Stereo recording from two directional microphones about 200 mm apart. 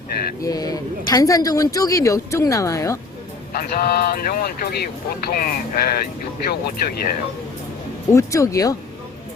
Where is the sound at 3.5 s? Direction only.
45° left (ahead or behind).